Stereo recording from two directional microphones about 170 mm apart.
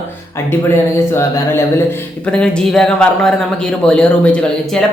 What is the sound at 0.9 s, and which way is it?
A man's voice, 15° left (ahead or behind).